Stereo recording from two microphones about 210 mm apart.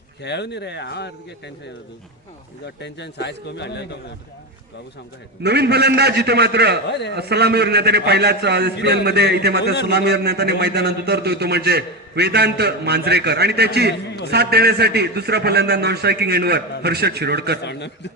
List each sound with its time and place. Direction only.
0.2 s a man's voice: 55° left (ahead or behind)
2.8 s a man's voice: 55° left (ahead or behind)
5.4 s a man's voice: 50° right (ahead or behind)
17.6 s a man's voice: 55° left (ahead or behind)